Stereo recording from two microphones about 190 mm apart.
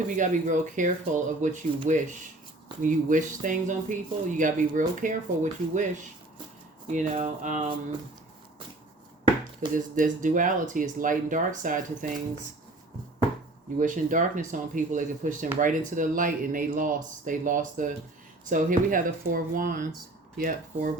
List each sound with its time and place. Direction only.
0.2 s speech: 40° right (ahead or behind)
9.6 s speech: 45° right (ahead or behind)
13.7 s speech: 45° right (ahead or behind)